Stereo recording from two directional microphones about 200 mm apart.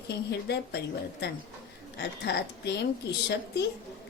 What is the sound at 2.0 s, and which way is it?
Speech, 55° left (ahead or behind).